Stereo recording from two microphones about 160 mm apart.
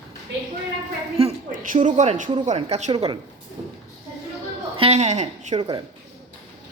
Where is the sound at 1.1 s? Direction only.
40° right (ahead or behind).